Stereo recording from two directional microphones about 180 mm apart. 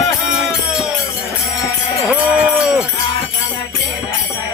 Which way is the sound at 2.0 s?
5° right (ahead or behind).